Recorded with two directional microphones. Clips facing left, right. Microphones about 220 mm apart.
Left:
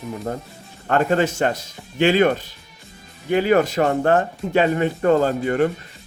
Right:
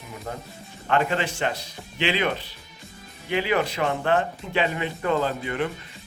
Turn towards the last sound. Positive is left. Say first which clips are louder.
# left 7 dB
turn(degrees=45)  # may be behind; listen again after turning